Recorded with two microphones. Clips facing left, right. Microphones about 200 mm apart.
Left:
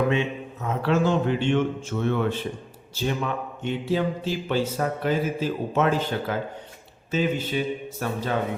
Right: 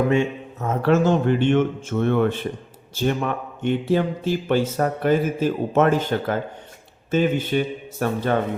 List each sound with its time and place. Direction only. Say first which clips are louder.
0.1 s a man's voice: right 4 dB; 45° right (ahead or behind)